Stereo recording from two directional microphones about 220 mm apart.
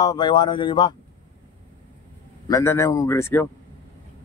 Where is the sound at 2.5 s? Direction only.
15° left (ahead or behind).